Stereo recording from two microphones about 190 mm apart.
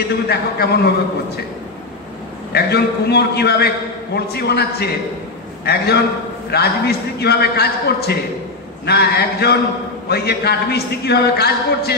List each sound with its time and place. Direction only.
0.3 s a man's voice: 60° left (ahead or behind)
2.5 s a man's voice: 60° left (ahead or behind)